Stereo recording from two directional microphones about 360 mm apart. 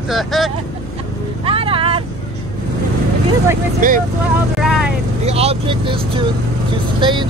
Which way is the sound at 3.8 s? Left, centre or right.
Right.